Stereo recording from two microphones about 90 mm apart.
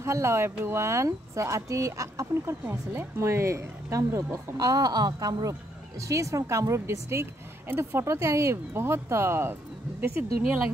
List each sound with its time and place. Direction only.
0.0 s a woman's voice: 30° right (ahead or behind)
4.6 s a woman's voice: 45° right (ahead or behind); by 10.6 s 20° right (ahead or behind)